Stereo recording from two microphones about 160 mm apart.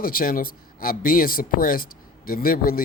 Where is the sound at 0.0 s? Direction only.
65° left (ahead or behind).